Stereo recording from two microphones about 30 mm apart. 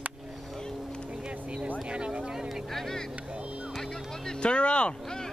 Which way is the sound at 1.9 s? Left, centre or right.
Right.